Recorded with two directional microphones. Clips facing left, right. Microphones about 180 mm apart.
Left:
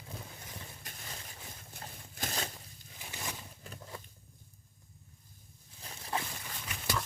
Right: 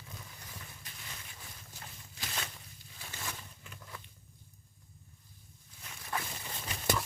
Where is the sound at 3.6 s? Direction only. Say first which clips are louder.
Left 5 dB; 30° left (ahead or behind).